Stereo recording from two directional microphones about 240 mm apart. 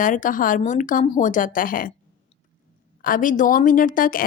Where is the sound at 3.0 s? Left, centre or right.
Left.